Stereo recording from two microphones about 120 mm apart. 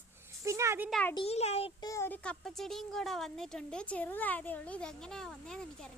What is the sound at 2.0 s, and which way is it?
Speech, 10° left (ahead or behind).